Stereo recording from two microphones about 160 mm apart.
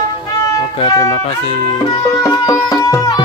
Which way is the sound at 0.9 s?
20° left (ahead or behind).